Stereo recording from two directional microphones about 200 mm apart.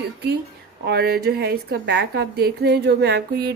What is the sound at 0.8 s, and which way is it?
A woman's voice, 50° right (ahead or behind).